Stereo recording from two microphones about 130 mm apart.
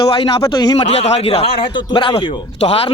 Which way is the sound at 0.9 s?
55° left (ahead or behind).